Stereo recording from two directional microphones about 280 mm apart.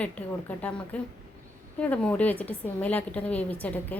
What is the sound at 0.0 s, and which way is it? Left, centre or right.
A woman's voice, centre.